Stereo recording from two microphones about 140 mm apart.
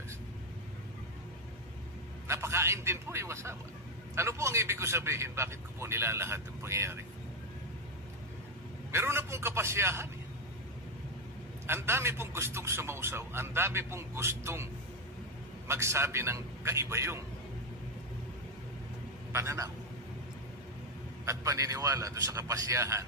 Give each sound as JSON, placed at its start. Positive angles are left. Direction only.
{"t": 2.2, "sound": "a man's voice", "side_deg": -20}
{"t": 8.9, "sound": "a man's voice", "side_deg": -20}
{"t": 11.6, "sound": "a man's voice", "side_deg": -15}
{"t": 15.7, "sound": "a man's voice", "side_deg": -20}
{"t": 19.3, "sound": "a man's voice", "side_deg": -20}
{"t": 21.3, "sound": "a man's voice", "side_deg": -20}